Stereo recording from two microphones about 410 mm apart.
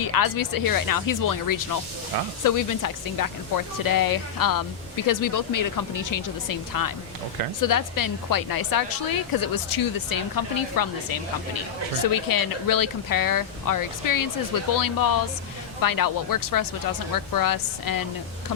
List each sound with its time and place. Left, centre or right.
0.0 s speech: left